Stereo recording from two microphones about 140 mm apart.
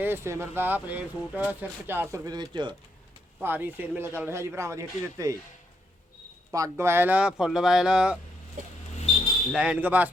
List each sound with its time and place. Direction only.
0.0 s speech: 15° right (ahead or behind); by 2.7 s 30° right (ahead or behind)
3.4 s speech: 15° right (ahead or behind)
6.5 s speech: 20° right (ahead or behind); by 8.2 s 5° right (ahead or behind)
9.5 s speech: 5° right (ahead or behind)